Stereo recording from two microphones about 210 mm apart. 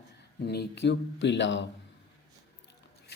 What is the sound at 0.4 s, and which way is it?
Speech, 50° left (ahead or behind).